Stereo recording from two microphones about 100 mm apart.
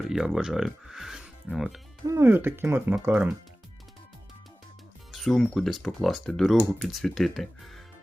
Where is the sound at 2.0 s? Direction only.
25° right (ahead or behind).